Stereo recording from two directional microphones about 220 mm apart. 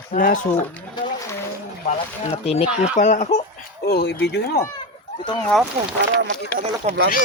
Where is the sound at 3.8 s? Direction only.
50° left (ahead or behind).